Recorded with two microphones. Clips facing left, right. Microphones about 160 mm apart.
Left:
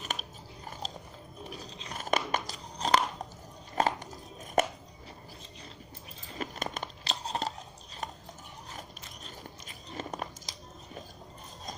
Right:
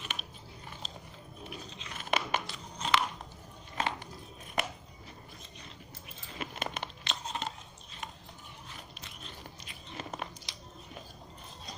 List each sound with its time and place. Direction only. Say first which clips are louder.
0.0 s biting: left 4 dB; 40° left (ahead or behind)
1.5 s crunch: left 2 dB; 35° left (ahead or behind)
3.8 s a sound: left 6 dB; 40° left (ahead or behind)
6.4 s crunch: left 2 dB; 40° left (ahead or behind)
8.0 s a sound: left 5 dB; 45° left (ahead or behind)
8.7 s biting: left 3 dB; 40° left (ahead or behind)